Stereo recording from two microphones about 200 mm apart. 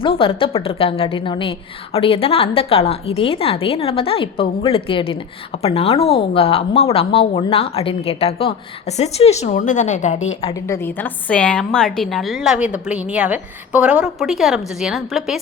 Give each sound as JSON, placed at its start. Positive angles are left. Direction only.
{"t": 0.0, "sound": "a woman's voice", "side_deg": 25}
{"t": 10.5, "sound": "a woman's voice", "side_deg": 15}